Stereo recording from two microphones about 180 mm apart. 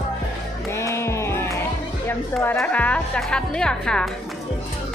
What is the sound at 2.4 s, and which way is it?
A woman's voice, 10° left (ahead or behind).